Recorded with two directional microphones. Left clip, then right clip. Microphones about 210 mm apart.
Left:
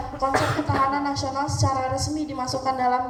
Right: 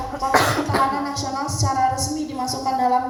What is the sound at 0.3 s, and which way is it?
Cough, 30° right (ahead or behind).